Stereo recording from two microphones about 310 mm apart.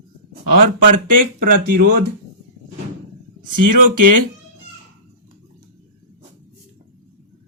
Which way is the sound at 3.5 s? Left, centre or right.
Right.